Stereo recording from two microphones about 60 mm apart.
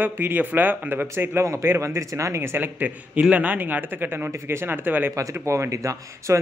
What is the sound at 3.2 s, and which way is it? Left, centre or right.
A man's voice, right.